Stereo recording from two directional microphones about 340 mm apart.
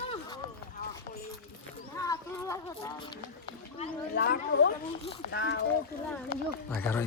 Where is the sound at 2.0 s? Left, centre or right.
Centre.